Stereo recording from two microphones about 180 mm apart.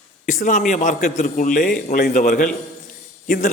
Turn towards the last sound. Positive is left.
turn(degrees=45)  # may be behind; listen again after turning